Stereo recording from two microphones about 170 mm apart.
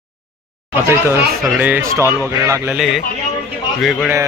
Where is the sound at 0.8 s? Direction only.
15° right (ahead or behind).